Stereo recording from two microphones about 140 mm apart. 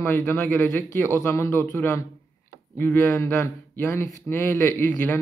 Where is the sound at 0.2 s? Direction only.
15° left (ahead or behind).